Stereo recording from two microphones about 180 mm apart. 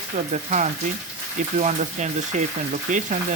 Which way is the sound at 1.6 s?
40° right (ahead or behind).